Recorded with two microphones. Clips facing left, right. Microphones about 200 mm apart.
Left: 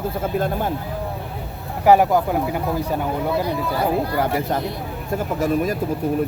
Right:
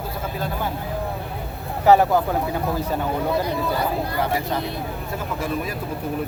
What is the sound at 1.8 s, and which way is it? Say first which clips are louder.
Speech: left 1 dB; 10° left (ahead or behind).